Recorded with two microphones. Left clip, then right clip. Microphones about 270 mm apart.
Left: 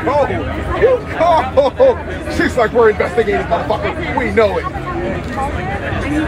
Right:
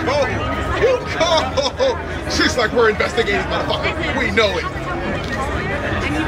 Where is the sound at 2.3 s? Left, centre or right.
Left.